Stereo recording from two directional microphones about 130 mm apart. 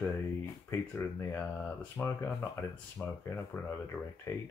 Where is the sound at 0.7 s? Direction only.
20° left (ahead or behind).